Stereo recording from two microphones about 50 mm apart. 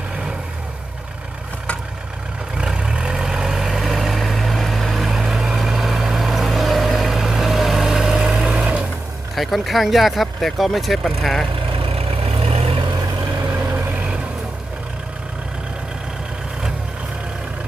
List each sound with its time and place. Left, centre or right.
2.6 s vehicle: centre
9.3 s speech: centre
13.5 s vehicle: right